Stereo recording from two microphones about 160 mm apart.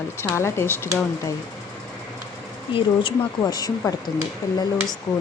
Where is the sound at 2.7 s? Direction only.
30° left (ahead or behind).